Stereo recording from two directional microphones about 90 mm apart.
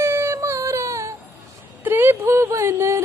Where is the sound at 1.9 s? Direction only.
25° right (ahead or behind).